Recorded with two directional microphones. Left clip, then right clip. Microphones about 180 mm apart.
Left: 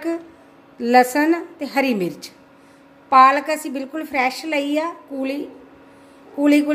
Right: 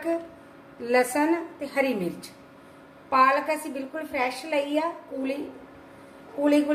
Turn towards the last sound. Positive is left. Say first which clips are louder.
# left 5 dB
turn(degrees=70)  # may be behind; listen again after turning